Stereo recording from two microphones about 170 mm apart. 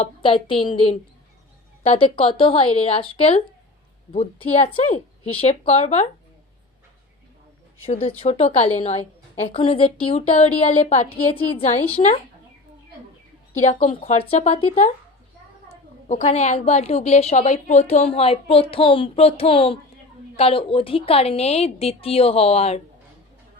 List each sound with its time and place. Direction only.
0.0 s a woman's voice: 30° left (ahead or behind)
1.8 s a woman's voice: 35° left (ahead or behind)
7.9 s a woman's voice: 35° left (ahead or behind)
13.6 s a woman's voice: 40° left (ahead or behind)
16.0 s a woman's voice: 40° left (ahead or behind)